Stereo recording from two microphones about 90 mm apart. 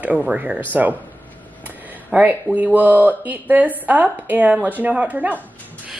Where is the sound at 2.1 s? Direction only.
20° right (ahead or behind).